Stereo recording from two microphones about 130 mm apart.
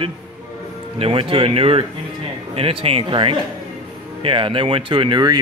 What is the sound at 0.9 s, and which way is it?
Speech, 45° right (ahead or behind).